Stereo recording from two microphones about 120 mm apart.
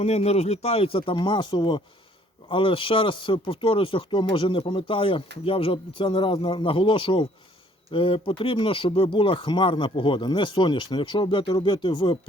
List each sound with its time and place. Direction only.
0.0 s speech: 60° left (ahead or behind); by 12.1 s 40° left (ahead or behind)